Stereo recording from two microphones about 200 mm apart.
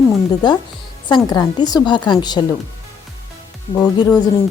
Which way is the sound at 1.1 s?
20° left (ahead or behind).